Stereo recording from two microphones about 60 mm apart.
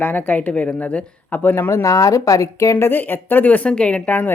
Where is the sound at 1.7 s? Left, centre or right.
Left.